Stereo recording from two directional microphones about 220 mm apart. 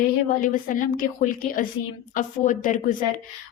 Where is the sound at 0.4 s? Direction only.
40° left (ahead or behind).